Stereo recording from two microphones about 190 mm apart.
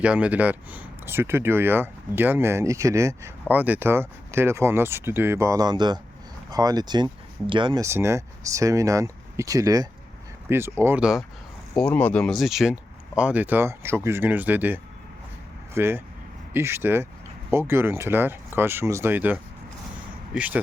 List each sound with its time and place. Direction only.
0.0 s speech: 5° right (ahead or behind)
11.8 s speech: 5° left (ahead or behind)